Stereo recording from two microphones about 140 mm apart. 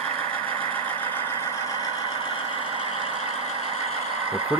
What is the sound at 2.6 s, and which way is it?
Vehicle, 40° left (ahead or behind).